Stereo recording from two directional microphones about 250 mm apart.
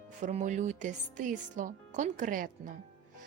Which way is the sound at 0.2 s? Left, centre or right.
Right.